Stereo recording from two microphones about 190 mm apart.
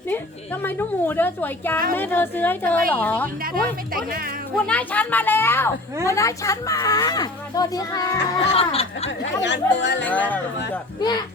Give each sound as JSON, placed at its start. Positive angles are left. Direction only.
{"t": 0.1, "sound": "a woman's voice", "side_deg": 10}
{"t": 3.4, "sound": "speech", "side_deg": -50}
{"t": 4.5, "sound": "a woman's voice", "side_deg": 5}
{"t": 8.5, "sound": "speech", "side_deg": 30}
{"t": 9.0, "sound": "speech", "side_deg": 70}
{"t": 10.1, "sound": "a woman's voice", "side_deg": 10}